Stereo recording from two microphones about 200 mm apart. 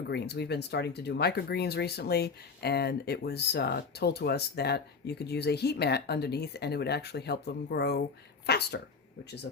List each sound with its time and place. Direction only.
0.1 s speech: 55° left (ahead or behind)